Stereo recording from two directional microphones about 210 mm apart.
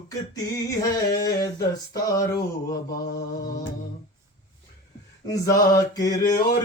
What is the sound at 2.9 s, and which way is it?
Mantra, 45° left (ahead or behind).